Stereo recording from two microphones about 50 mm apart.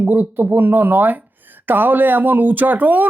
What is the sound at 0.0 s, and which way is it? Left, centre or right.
Speech, right.